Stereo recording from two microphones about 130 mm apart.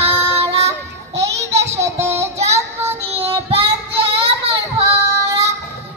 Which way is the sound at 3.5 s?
45° right (ahead or behind).